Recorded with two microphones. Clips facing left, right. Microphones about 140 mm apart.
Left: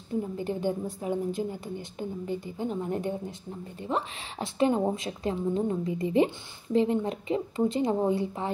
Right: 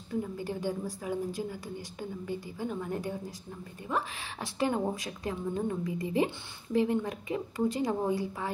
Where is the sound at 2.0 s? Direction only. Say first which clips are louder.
Left 4 dB; 25° left (ahead or behind).